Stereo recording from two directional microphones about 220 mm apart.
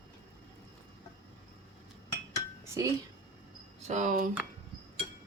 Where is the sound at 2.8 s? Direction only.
15° right (ahead or behind).